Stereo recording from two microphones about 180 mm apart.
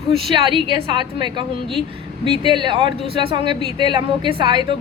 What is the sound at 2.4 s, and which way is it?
A woman's voice, 25° right (ahead or behind).